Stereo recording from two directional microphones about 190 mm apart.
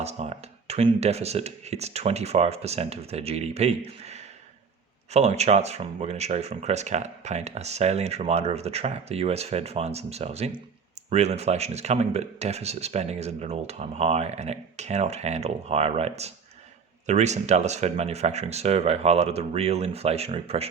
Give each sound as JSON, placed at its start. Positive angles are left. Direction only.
{"t": 0.0, "sound": "speech", "side_deg": -35}